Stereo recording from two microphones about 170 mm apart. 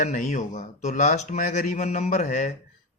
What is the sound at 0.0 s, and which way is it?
Speech, 45° left (ahead or behind).